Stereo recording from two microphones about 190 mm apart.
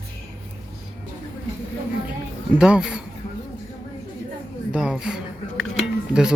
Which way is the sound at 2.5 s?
5° right (ahead or behind).